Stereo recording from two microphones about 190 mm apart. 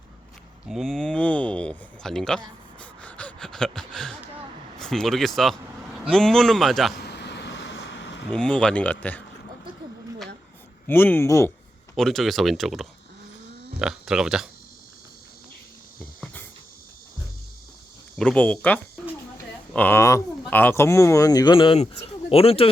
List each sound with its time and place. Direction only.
0.7 s speech: centre (ahead or behind)
2.8 s a sound: 5° left (ahead or behind)
4.8 s speech: centre (ahead or behind)
6.9 s vehicle: 60° left (ahead or behind)
8.3 s speech: 5° left (ahead or behind)
10.8 s speech: 10° left (ahead or behind)
11.9 s speech: centre (ahead or behind)
18.2 s speech: 5° left (ahead or behind); by 22.7 s 30° left (ahead or behind)